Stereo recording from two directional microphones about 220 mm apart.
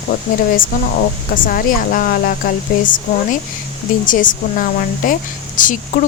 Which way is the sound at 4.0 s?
35° left (ahead or behind).